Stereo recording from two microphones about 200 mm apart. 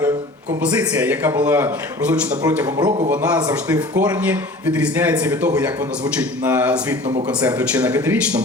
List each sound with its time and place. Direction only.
0.6 s a man's voice: 5° right (ahead or behind)
2.7 s speech: 20° right (ahead or behind)
3.2 s a man's voice: 5° right (ahead or behind)